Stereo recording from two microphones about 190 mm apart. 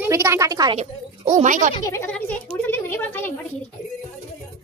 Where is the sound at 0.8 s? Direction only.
40° right (ahead or behind).